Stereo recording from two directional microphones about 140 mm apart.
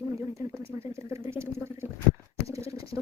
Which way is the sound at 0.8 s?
20° right (ahead or behind).